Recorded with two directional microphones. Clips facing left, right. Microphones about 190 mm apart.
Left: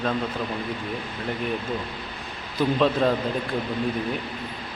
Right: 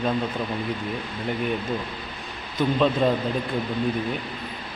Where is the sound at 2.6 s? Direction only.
Centre (ahead or behind).